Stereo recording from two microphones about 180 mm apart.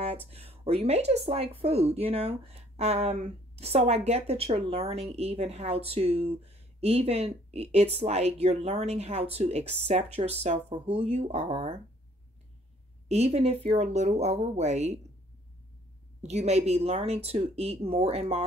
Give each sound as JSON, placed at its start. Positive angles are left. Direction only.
{"t": 0.0, "sound": "speech", "side_deg": -35}
{"t": 13.1, "sound": "speech", "side_deg": -35}
{"t": 16.2, "sound": "speech", "side_deg": -40}